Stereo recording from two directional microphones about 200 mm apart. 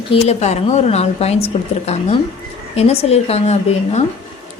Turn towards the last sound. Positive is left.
turn(degrees=35)  # may be behind; listen again after turning